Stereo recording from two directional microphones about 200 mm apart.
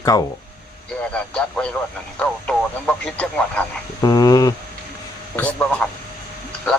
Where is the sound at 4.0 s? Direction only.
20° left (ahead or behind).